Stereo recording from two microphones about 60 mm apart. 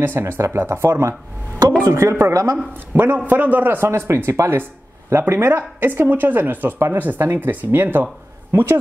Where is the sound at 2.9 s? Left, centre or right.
Right.